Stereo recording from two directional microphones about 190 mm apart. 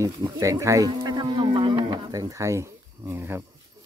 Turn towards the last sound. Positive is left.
turn(degrees=-10)  # may be behind; listen again after turning